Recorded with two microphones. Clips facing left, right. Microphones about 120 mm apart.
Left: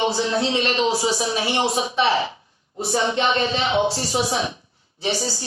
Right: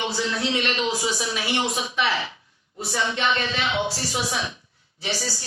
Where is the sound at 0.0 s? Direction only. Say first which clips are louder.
Left 5 dB; 30° left (ahead or behind).